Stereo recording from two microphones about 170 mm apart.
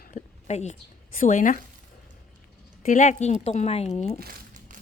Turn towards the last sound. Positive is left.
turn(degrees=-55)  # may be behind; listen again after turning